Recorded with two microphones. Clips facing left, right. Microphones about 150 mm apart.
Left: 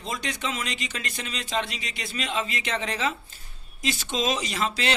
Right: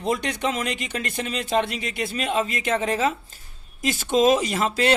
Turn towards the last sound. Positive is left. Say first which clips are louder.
# right 6 dB
turn(degrees=-45)  # may be behind; listen again after turning